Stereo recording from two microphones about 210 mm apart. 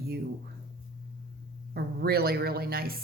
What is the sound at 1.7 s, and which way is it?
Speech, 50° right (ahead or behind).